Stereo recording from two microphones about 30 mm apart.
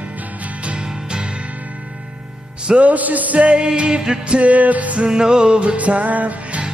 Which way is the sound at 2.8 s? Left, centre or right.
Right.